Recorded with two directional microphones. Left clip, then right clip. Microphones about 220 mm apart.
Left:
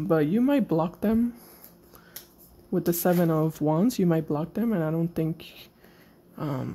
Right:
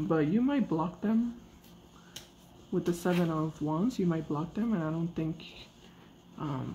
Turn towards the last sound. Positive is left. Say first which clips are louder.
# left 5 dB
turn(degrees=45)  # may be behind; listen again after turning